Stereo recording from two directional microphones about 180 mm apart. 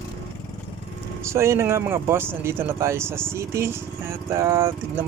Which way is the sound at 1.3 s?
15° right (ahead or behind).